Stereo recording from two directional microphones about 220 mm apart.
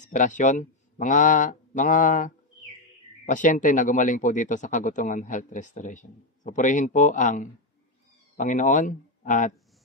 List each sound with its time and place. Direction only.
0.0 s speech: 35° left (ahead or behind)